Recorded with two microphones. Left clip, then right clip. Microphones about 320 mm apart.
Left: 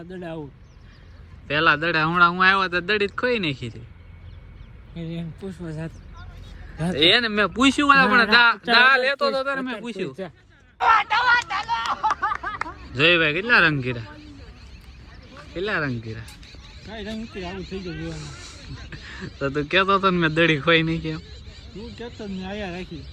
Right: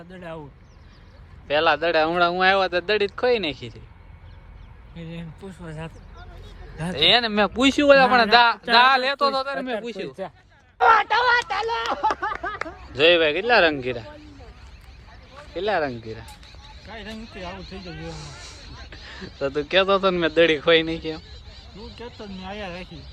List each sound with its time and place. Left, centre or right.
0.1 s speech: centre
1.5 s speech: centre
4.9 s speech: centre
6.9 s speech: centre
10.8 s speech: centre
13.0 s speech: centre
15.5 s speech: centre
16.9 s speech: centre
17.8 s speech: right
18.1 s speech: centre